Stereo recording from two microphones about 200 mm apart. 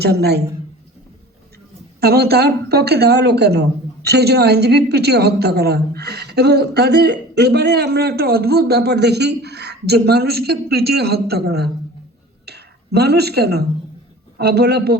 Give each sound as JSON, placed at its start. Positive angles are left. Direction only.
{"t": 0.0, "sound": "speech", "side_deg": -55}
{"t": 2.0, "sound": "a man's voice", "side_deg": -55}